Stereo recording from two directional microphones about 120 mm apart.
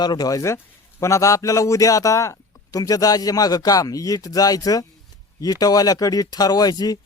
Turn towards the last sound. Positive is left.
turn(degrees=35)  # may be behind; listen again after turning